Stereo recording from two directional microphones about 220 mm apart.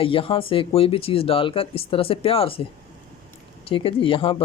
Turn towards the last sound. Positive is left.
turn(degrees=25)  # may be behind; listen again after turning